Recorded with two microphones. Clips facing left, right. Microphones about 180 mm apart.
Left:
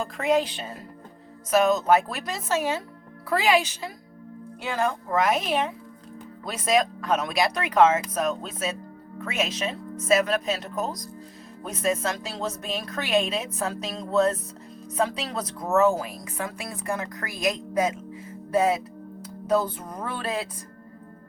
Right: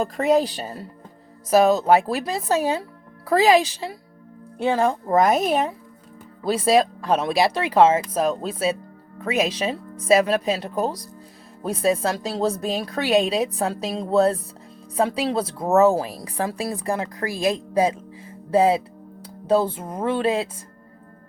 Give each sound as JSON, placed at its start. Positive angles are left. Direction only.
{"t": 0.0, "sound": "a woman's voice", "side_deg": -40}
{"t": 6.4, "sound": "a woman's voice", "side_deg": -30}
{"t": 19.2, "sound": "music", "side_deg": -30}